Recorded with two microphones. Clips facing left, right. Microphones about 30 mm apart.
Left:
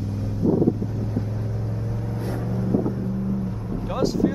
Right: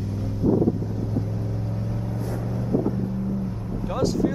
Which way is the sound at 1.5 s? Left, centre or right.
Centre.